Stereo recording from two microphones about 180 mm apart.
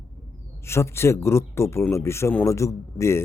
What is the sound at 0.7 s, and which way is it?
Speech, 15° left (ahead or behind).